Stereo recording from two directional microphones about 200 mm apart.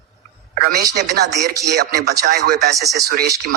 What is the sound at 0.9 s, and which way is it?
Speech, 55° right (ahead or behind).